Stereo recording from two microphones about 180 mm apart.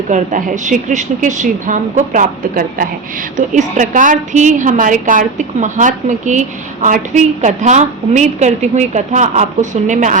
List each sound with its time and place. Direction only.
0.1 s a woman's voice: 45° right (ahead or behind)